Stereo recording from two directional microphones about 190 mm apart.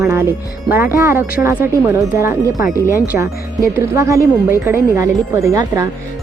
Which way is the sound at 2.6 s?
45° left (ahead or behind).